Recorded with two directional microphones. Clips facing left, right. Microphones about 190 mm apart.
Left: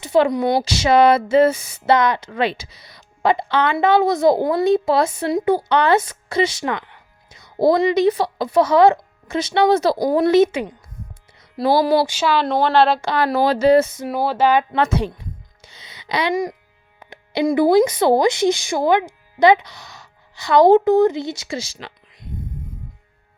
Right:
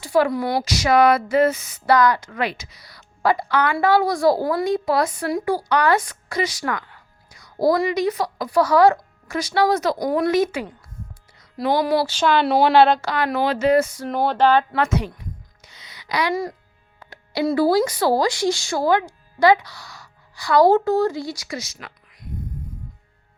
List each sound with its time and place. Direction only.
0.0 s a woman's voice: 20° left (ahead or behind)
12.0 s speech: 5° left (ahead or behind)
13.1 s speech: 35° left (ahead or behind)
14.1 s a sound: 5° left (ahead or behind)
14.7 s a sound: 25° left (ahead or behind)
17.0 s speech: 20° left (ahead or behind)